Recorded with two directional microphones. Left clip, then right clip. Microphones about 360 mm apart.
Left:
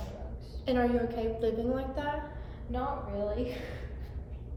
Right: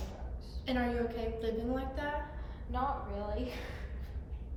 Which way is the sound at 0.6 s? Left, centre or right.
Centre.